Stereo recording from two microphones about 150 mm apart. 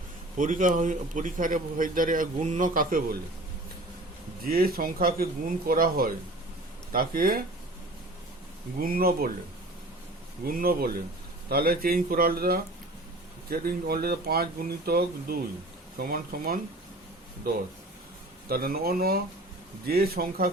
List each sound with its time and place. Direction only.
0.3 s a man's voice: 60° right (ahead or behind)
4.4 s speech: 80° right
8.8 s speech: 75° right (ahead or behind)
10.4 s speech: 85° right
16.0 s speech: 80° right
18.4 s speech: 90° right